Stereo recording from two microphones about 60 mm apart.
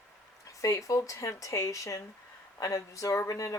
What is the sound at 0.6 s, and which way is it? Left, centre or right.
Speech, left.